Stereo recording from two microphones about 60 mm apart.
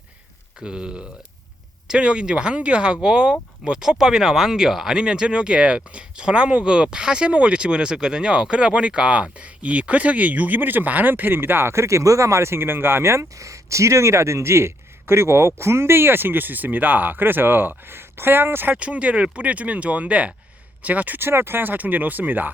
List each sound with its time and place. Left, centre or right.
0.6 s speech: centre; by 18.7 s right
18.7 s speech: right
21.2 s speech: right